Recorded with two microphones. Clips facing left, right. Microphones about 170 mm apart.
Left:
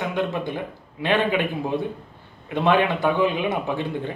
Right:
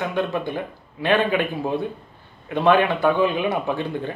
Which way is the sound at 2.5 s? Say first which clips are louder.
Right 2 dB; 20° left (ahead or behind).